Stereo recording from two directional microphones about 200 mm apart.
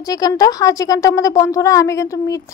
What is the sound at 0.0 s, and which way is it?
A woman's voice, 20° left (ahead or behind).